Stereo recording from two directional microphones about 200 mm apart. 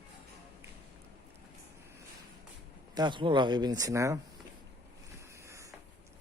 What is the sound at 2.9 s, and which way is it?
Speech, 20° right (ahead or behind).